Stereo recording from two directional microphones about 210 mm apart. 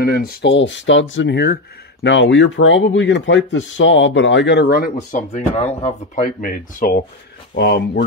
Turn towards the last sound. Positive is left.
turn(degrees=50)  # may be behind; listen again after turning